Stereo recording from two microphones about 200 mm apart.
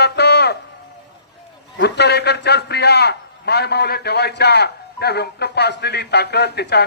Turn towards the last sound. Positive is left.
turn(degrees=55)  # may be behind; listen again after turning